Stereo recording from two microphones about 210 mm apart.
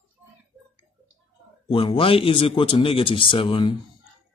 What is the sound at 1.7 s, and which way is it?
Speech, 25° left (ahead or behind).